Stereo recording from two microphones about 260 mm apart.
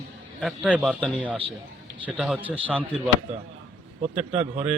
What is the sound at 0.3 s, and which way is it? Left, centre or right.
A man's voice, centre.